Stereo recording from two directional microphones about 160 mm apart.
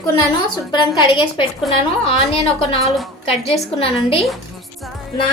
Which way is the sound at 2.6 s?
40° left (ahead or behind).